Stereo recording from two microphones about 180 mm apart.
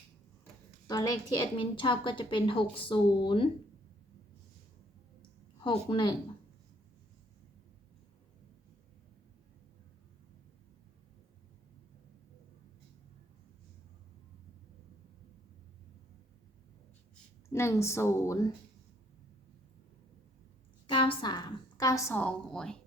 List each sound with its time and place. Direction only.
0.9 s a woman's voice: 20° left (ahead or behind)
5.5 s speech: 30° left (ahead or behind)
17.5 s a woman's voice: 15° left (ahead or behind)
20.9 s a woman's voice: 30° left (ahead or behind); by 22.8 s 5° left (ahead or behind)